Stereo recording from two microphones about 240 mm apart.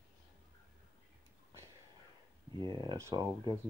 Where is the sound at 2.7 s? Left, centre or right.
Centre.